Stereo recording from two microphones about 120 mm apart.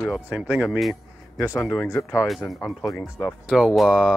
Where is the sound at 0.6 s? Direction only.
Centre (ahead or behind).